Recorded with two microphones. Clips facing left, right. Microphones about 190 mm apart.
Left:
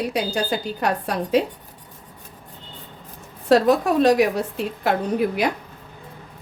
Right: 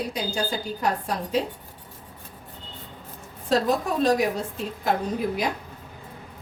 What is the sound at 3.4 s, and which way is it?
A woman's voice, 70° left (ahead or behind).